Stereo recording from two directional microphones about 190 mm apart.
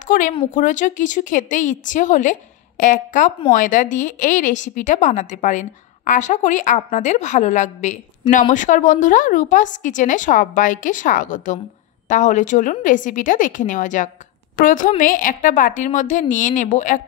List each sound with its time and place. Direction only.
0.1 s a woman's voice: 45° left (ahead or behind)